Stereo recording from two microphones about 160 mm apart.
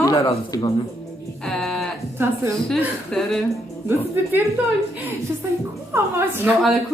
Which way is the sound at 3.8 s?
15° right (ahead or behind).